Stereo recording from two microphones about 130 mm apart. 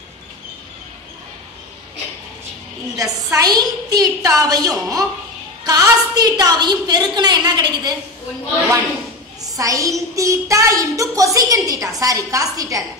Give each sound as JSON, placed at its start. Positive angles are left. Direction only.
{"t": 3.0, "sound": "a woman's voice", "side_deg": -25}
{"t": 9.6, "sound": "a woman's voice", "side_deg": -25}